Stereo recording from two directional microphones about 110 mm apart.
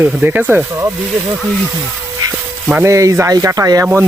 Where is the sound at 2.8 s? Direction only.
30° right (ahead or behind).